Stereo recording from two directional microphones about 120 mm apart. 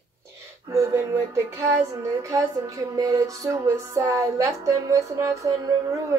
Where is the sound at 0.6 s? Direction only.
25° right (ahead or behind).